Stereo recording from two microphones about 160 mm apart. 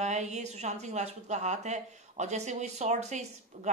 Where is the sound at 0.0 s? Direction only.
45° right (ahead or behind).